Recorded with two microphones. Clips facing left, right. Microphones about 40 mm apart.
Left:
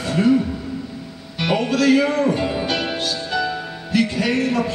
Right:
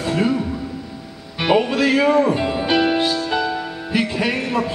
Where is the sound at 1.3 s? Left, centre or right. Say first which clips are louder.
Right 3 dB; right.